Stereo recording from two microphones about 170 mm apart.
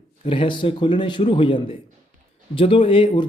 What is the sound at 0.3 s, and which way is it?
Speech, 30° left (ahead or behind).